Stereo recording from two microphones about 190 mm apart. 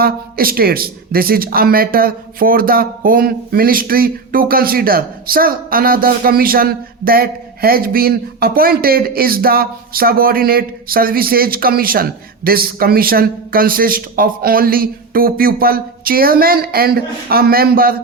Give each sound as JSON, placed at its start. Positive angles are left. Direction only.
{"t": 0.0, "sound": "speech", "side_deg": -50}